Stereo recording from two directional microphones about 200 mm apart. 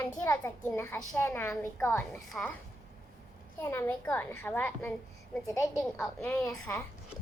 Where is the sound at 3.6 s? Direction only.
15° left (ahead or behind).